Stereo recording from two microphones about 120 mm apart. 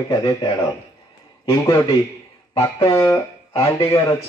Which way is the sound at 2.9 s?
25° left (ahead or behind).